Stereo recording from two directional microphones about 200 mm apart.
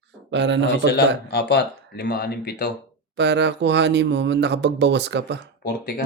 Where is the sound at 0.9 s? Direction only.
60° left (ahead or behind).